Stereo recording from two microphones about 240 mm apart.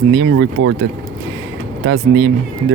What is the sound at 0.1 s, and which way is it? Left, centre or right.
Speech, right.